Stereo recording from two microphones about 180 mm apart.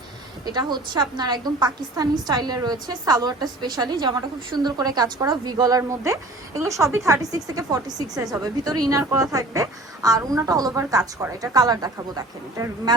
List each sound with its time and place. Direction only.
0.4 s a woman's voice: 25° right (ahead or behind)